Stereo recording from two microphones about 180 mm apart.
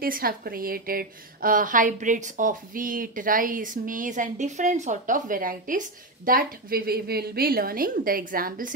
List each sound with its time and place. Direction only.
0.0 s a woman's voice: 55° right (ahead or behind)